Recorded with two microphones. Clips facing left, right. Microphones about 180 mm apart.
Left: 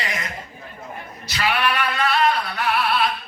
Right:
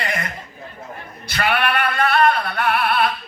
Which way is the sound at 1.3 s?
55° right (ahead or behind).